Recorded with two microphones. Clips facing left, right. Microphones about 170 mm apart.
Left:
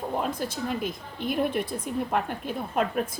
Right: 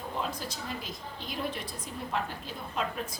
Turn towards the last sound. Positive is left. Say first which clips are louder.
# left 8 dB
turn(degrees=55)  # may be behind; listen again after turning